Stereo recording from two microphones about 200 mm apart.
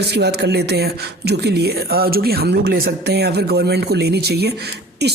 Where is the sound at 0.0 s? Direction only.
55° right (ahead or behind).